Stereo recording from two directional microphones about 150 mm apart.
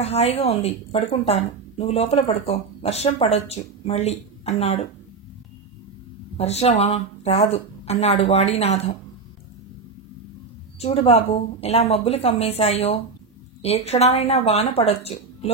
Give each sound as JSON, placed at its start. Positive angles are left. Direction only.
{"t": 0.0, "sound": "speech", "side_deg": 45}
{"t": 6.3, "sound": "speech", "side_deg": 45}
{"t": 11.1, "sound": "speech", "side_deg": 45}